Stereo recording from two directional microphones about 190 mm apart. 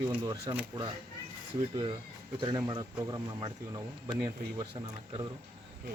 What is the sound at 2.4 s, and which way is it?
Speech, 25° right (ahead or behind).